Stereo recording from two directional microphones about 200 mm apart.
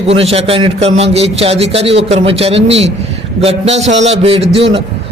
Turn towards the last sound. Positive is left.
turn(degrees=-30)  # may be behind; listen again after turning